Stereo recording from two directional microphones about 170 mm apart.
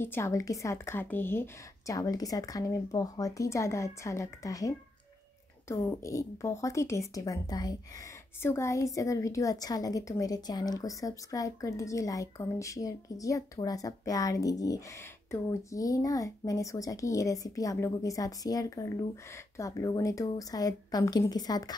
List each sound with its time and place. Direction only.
0.0 s a woman's voice: 15° left (ahead or behind)